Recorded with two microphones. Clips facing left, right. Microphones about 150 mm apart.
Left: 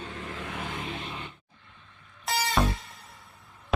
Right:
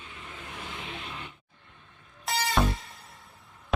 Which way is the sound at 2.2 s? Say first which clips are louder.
Even; 5° left (ahead or behind).